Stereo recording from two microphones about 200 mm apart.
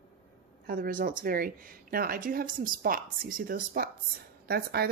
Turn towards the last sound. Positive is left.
turn(degrees=-50)  # may be behind; listen again after turning